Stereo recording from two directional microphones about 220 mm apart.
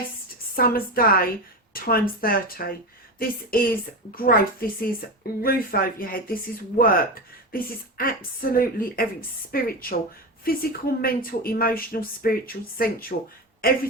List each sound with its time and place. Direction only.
0.5 s speech: 40° left (ahead or behind)